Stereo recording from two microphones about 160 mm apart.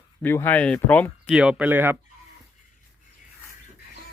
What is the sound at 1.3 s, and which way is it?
Speech, 5° right (ahead or behind).